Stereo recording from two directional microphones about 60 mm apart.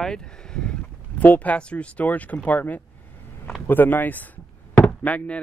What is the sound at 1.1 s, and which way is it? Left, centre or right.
Speech, left.